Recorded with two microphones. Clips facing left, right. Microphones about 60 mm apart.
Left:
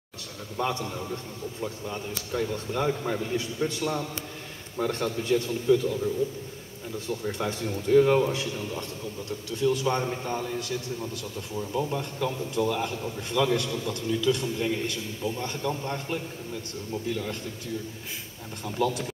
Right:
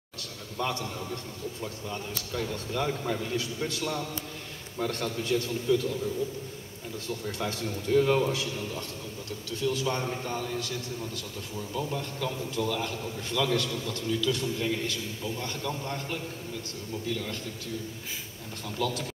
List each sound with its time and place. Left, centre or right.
0.6 s a man's voice: centre
2.9 s a man's voice: centre
3.3 s a man's voice: left
7.1 s a man's voice: left
8.3 s a man's voice: left
8.5 s a man's voice: centre
9.6 s a man's voice: left
11.5 s a man's voice: centre
18.8 s a man's voice: left